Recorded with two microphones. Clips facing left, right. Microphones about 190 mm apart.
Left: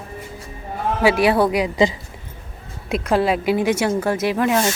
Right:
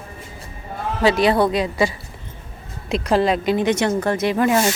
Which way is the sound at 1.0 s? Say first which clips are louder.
Even; 10° left (ahead or behind).